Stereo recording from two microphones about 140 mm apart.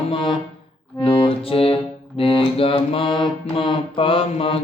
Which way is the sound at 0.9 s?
40° left (ahead or behind).